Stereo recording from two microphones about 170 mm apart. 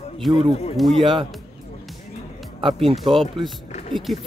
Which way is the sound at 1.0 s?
30° right (ahead or behind).